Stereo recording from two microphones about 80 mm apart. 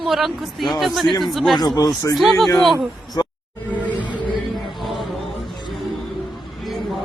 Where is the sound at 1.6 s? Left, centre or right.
Left.